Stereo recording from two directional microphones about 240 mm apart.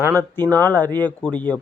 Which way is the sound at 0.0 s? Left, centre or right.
Centre.